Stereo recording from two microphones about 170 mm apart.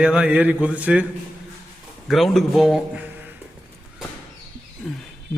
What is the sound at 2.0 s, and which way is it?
A man's voice, centre (ahead or behind).